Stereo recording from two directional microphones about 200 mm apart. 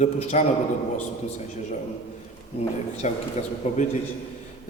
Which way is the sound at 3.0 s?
35° left (ahead or behind).